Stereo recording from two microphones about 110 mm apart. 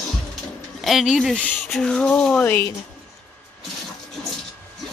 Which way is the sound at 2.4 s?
20° left (ahead or behind).